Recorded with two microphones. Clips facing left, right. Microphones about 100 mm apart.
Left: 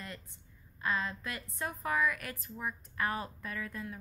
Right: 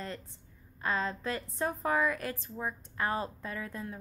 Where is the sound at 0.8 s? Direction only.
30° right (ahead or behind).